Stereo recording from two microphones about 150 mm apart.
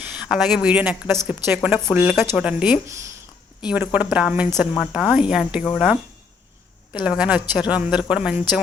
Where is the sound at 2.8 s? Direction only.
20° right (ahead or behind).